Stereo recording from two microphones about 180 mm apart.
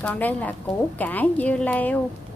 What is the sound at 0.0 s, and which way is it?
A woman's voice, 10° left (ahead or behind).